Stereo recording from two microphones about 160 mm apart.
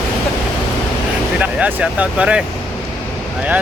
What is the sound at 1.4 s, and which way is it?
Speech, 10° right (ahead or behind).